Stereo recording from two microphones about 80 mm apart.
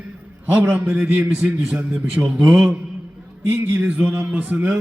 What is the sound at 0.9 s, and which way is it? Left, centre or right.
Speech, right.